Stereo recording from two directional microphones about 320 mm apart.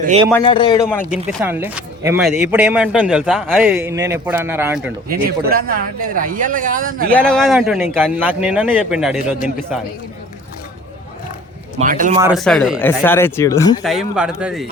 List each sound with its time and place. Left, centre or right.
0.0 s speech: right
0.4 s speech: centre
1.4 s a man's voice: centre
5.0 s speech: right
7.1 s a man's voice: centre
11.8 s speech: right
12.2 s speech: centre
13.8 s a man's voice: centre